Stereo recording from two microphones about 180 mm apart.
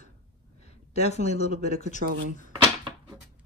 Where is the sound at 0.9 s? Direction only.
40° left (ahead or behind).